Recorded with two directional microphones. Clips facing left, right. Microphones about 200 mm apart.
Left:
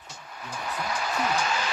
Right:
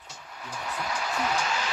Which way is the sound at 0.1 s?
50° left (ahead or behind).